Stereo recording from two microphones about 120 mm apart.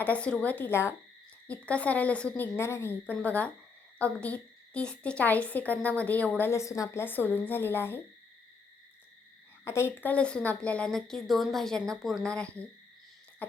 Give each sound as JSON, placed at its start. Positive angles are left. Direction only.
{"t": 0.0, "sound": "a woman's voice", "side_deg": 10}
{"t": 9.6, "sound": "a woman's voice", "side_deg": 20}